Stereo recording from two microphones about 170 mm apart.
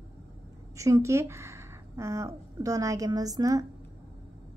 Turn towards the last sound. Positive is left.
turn(degrees=-20)  # may be behind; listen again after turning